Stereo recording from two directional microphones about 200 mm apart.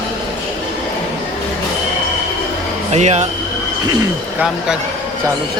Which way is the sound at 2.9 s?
35° right (ahead or behind).